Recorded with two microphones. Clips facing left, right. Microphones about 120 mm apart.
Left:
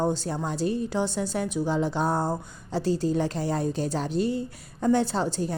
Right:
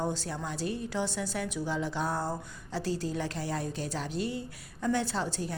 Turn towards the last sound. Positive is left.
turn(degrees=30)  # may be behind; listen again after turning